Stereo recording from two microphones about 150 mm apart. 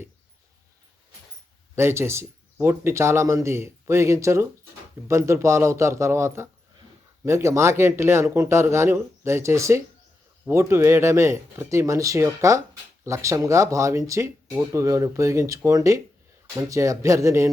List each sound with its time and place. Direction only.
1.7 s speech: 15° right (ahead or behind)